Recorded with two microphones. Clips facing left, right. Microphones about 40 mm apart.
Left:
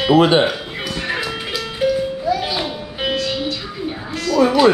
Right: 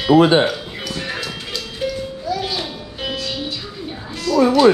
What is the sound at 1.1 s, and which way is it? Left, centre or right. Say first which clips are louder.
Music: left 4 dB; centre.